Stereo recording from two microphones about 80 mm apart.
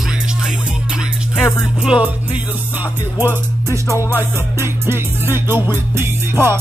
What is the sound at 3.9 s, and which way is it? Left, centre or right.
Music, left.